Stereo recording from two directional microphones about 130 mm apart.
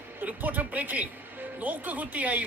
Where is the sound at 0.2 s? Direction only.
15° right (ahead or behind).